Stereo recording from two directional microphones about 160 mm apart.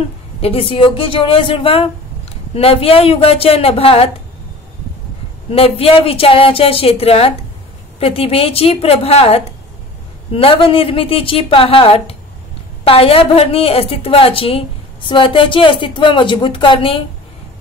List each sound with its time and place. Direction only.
0.4 s a woman's voice: 35° left (ahead or behind)
5.5 s a woman's voice: 35° left (ahead or behind)